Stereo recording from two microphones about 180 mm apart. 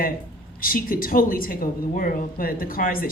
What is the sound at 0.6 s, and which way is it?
A woman's voice, 50° left (ahead or behind).